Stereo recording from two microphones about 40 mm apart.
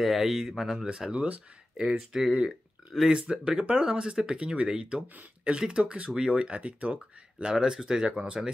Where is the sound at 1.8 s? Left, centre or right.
Centre; by 7.5 s right.